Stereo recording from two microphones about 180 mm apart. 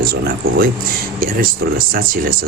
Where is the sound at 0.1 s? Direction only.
60° right (ahead or behind).